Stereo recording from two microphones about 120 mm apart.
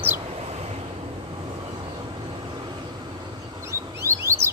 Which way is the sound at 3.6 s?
20° right (ahead or behind).